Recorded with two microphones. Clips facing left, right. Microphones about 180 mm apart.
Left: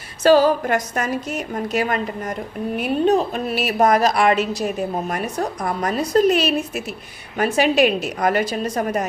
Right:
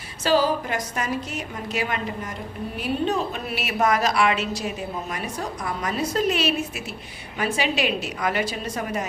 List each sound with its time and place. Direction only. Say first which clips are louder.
0.2 s a woman's voice: left 7 dB; 55° left (ahead or behind)
3.1 s a woman's voice: left 7 dB; 40° left (ahead or behind)